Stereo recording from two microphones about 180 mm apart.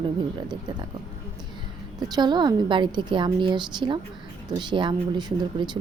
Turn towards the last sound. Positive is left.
turn(degrees=-25)  # may be behind; listen again after turning